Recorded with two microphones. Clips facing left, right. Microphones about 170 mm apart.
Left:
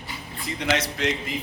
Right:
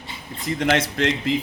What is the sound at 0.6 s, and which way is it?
Speech, 55° right (ahead or behind).